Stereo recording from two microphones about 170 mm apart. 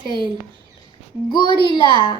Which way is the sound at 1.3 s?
25° left (ahead or behind).